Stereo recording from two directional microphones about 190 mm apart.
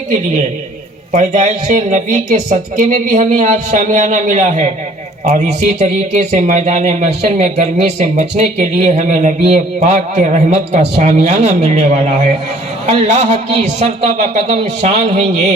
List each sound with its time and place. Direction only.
1.1 s speech: 40° right (ahead or behind)